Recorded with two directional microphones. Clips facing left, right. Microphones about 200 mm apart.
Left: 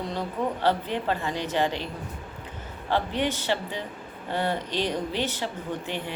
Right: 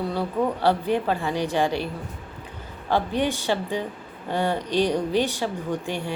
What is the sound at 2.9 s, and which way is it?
A woman's voice, 15° right (ahead or behind).